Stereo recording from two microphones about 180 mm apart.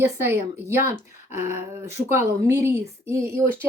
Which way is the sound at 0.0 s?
15° right (ahead or behind).